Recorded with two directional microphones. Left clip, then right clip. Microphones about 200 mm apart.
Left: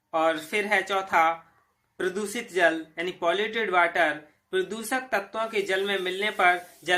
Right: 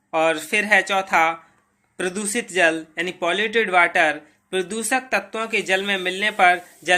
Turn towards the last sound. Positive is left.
turn(degrees=-40)  # may be behind; listen again after turning